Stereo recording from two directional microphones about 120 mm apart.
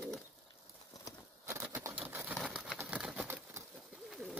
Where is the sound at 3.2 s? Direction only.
20° right (ahead or behind).